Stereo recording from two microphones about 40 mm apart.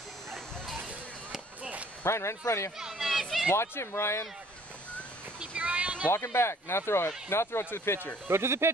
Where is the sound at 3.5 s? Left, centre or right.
Left.